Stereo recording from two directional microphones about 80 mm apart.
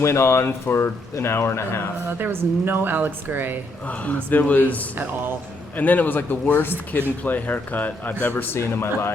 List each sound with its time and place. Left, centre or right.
0.0 s speech: left
2.0 s a woman's voice: right
3.8 s speech: centre